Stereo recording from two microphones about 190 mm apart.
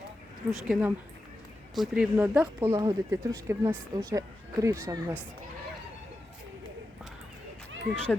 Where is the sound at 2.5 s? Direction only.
15° right (ahead or behind).